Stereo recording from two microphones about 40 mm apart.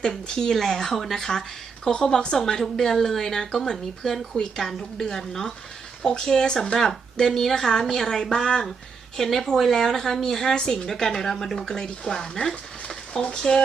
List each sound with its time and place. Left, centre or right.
0.1 s speech: centre
9.1 s speech: centre